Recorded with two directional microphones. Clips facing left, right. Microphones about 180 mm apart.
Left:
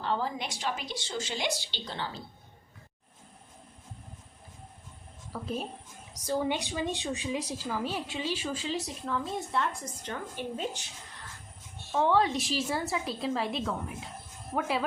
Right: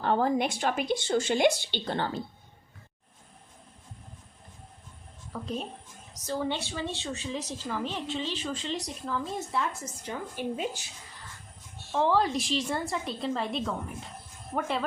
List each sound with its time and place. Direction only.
0.0 s a woman's voice: 55° right (ahead or behind)
5.3 s a woman's voice: 5° left (ahead or behind)
11.9 s speech: centre (ahead or behind)